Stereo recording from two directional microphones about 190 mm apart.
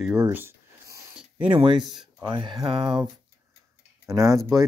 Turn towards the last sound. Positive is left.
turn(degrees=0)  # may be behind; listen again after turning